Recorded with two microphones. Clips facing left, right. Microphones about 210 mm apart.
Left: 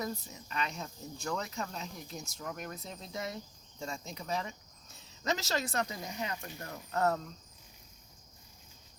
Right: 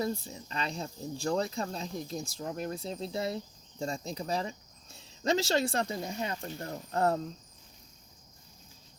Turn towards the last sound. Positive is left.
turn(degrees=-30)  # may be behind; listen again after turning